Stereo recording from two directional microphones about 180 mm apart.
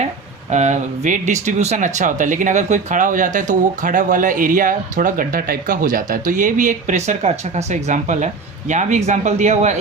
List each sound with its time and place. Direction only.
0.5 s speech: 40° right (ahead or behind)